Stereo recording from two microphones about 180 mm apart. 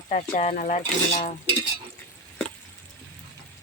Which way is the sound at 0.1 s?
40° left (ahead or behind).